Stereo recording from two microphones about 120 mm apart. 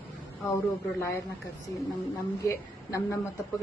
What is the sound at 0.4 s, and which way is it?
Speech, 25° left (ahead or behind).